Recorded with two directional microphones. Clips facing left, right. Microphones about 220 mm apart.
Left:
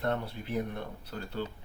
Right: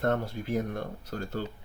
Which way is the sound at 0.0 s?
45° right (ahead or behind).